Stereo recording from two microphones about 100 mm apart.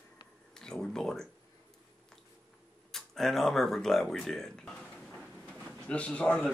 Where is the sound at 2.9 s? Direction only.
Centre (ahead or behind).